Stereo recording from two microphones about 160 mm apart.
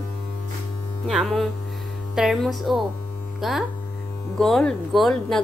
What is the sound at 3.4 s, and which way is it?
Hum, centre (ahead or behind).